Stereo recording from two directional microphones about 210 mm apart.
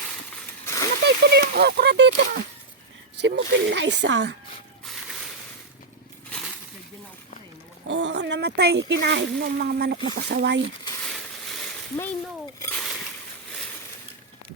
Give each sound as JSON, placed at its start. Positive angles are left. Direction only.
{"t": 0.6, "sound": "splash", "side_deg": 15}
{"t": 1.0, "sound": "speech", "side_deg": -50}
{"t": 7.9, "sound": "speech", "side_deg": -60}
{"t": 11.0, "sound": "a sound", "side_deg": 0}